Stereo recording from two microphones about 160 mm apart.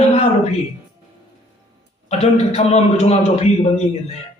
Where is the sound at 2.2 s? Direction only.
45° left (ahead or behind).